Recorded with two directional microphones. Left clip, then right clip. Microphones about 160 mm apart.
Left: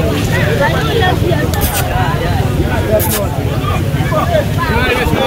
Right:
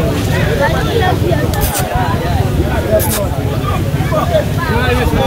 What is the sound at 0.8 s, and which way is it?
Vehicle, 70° right (ahead or behind).